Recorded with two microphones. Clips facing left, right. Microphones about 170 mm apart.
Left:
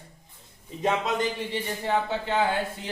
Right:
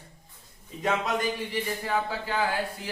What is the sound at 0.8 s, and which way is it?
Speech, 20° left (ahead or behind).